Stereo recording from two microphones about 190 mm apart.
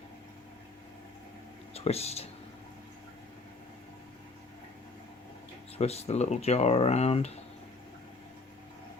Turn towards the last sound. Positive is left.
turn(degrees=35)  # may be behind; listen again after turning